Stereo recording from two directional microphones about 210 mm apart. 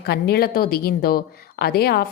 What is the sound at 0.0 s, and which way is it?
Speech, 50° left (ahead or behind).